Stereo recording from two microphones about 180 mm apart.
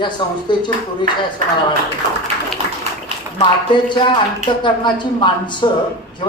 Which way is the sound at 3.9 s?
25° left (ahead or behind).